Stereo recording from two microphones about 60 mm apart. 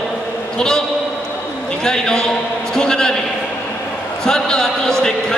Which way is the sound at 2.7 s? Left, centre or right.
Centre.